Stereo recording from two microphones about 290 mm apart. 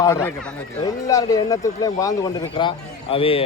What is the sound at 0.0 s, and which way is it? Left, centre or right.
A man's voice, centre.